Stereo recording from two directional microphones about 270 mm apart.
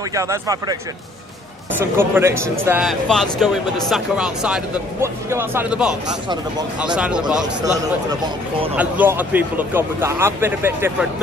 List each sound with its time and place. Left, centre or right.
0.1 s speech: centre
1.8 s speech: centre
6.0 s speech: centre
7.0 s speech: centre
8.7 s speech: centre